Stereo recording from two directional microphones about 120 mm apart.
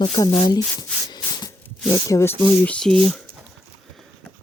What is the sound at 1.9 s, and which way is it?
Speech, 25° left (ahead or behind).